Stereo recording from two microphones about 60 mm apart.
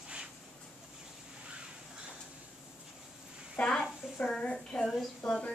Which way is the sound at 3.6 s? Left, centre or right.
Left.